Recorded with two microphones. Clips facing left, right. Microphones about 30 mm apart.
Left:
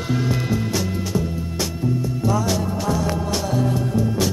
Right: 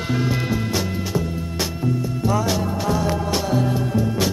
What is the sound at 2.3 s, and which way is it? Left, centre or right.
Music, centre.